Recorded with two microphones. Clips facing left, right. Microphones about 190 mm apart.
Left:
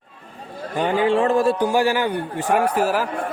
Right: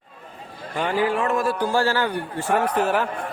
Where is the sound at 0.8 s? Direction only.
20° left (ahead or behind).